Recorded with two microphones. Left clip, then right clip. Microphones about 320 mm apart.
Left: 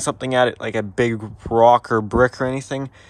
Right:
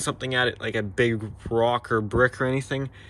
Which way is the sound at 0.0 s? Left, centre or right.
Centre.